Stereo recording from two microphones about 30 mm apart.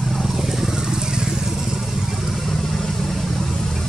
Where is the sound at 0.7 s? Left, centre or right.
Right.